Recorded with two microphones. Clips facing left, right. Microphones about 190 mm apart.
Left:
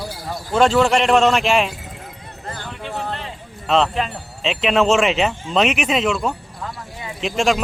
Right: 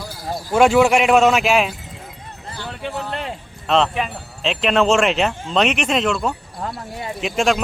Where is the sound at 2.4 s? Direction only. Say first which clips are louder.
Left 1 dB; 50° left (ahead or behind).